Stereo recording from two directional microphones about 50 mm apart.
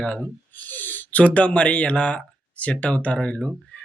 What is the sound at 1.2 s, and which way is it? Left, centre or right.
Speech, left.